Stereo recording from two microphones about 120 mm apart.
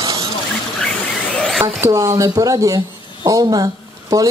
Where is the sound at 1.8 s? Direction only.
25° right (ahead or behind).